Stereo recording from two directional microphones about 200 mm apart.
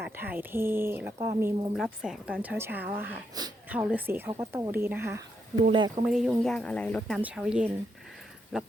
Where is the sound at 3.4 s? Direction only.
20° right (ahead or behind).